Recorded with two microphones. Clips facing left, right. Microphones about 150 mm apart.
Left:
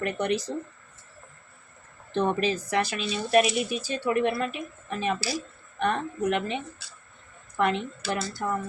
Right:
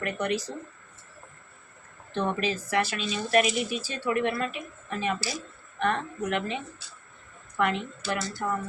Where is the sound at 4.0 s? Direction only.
20° left (ahead or behind).